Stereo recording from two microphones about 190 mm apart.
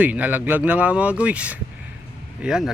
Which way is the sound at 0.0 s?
10° right (ahead or behind).